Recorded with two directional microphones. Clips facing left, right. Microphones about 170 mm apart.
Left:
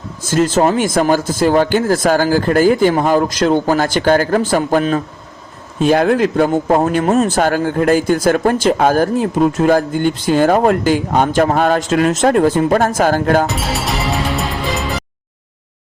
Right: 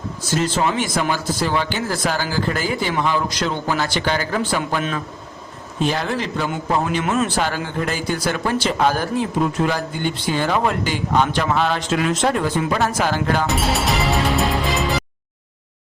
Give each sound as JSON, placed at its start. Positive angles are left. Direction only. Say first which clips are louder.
{"t": 0.3, "sound": "speech", "louder": "left 7 dB", "side_deg": 45}
{"t": 5.8, "sound": "speech", "louder": "left 10 dB", "side_deg": 50}
{"t": 13.5, "sound": "music", "louder": "even", "side_deg": 0}